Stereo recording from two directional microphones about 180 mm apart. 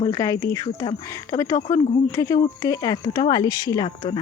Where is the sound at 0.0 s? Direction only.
20° left (ahead or behind).